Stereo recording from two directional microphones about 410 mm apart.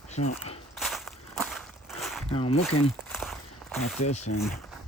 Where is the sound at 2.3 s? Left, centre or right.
Centre.